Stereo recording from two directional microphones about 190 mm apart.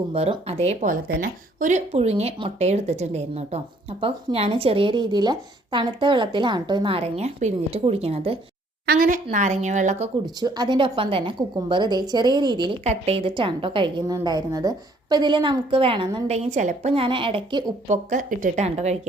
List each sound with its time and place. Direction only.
0.1 s a woman's voice: 30° right (ahead or behind)
8.9 s a woman's voice: 45° right (ahead or behind)
10.2 s speech: 20° right (ahead or behind)
12.8 s a woman's voice: 35° right (ahead or behind)